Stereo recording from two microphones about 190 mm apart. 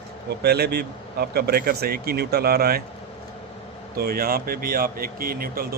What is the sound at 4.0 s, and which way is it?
Speech, 50° right (ahead or behind).